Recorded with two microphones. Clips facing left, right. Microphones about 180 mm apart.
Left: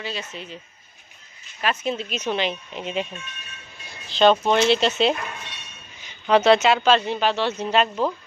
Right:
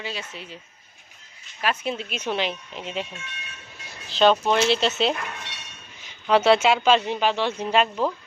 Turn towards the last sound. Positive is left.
turn(degrees=-10)  # may be behind; listen again after turning